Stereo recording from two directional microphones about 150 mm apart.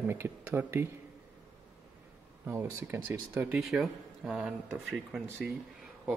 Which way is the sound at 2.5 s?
15° right (ahead or behind).